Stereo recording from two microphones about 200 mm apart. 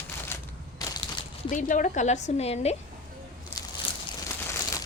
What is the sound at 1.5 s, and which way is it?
Speech, 40° left (ahead or behind).